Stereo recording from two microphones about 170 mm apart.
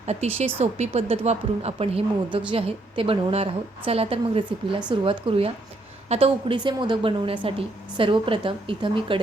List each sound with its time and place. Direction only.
0.0 s a woman's voice: 40° right (ahead or behind)